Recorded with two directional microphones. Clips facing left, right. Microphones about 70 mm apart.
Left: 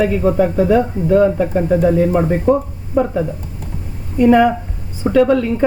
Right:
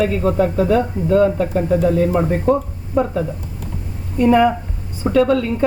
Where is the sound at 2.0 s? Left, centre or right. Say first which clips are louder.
Left 2 dB; centre.